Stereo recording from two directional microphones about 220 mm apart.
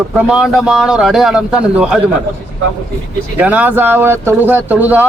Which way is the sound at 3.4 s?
5° right (ahead or behind).